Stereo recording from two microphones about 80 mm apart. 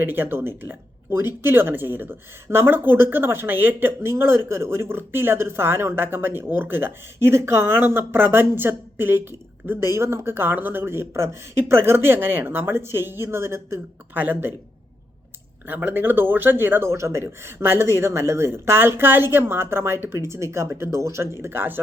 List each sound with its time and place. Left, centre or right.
0.0 s a woman's voice: right
14.2 s a woman's voice: right
15.6 s a man's voice: right